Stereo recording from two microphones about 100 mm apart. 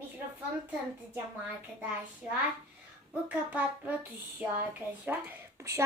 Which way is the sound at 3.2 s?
15° right (ahead or behind).